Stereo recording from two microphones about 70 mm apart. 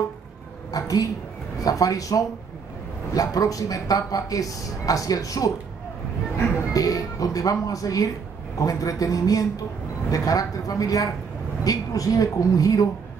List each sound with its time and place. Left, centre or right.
0.7 s a woman's voice: left
6.7 s speech: left